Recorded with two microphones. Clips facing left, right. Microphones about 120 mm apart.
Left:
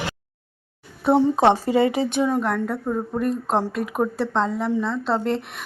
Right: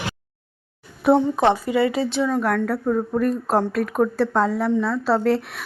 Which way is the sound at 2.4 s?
Centre (ahead or behind).